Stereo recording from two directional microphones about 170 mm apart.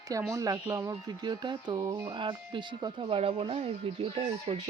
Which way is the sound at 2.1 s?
30° right (ahead or behind).